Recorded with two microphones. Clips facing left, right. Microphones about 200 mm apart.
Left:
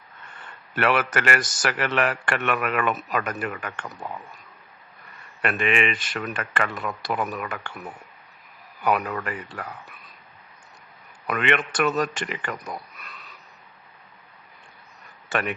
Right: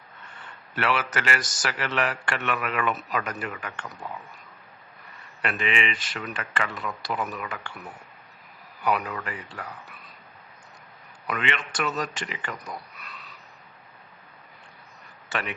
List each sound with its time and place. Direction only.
0.8 s a man's voice: 55° left (ahead or behind)
5.4 s a man's voice: 55° left (ahead or behind)
8.8 s a man's voice: 50° left (ahead or behind)
11.3 s a man's voice: 55° left (ahead or behind)
15.3 s speech: 50° left (ahead or behind)